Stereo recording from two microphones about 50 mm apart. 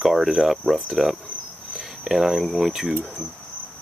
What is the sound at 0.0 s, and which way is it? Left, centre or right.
Speech, centre.